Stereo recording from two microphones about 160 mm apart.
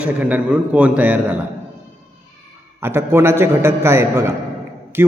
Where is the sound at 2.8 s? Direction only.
15° right (ahead or behind).